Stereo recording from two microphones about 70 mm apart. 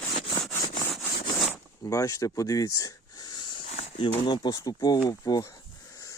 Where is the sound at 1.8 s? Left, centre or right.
Left.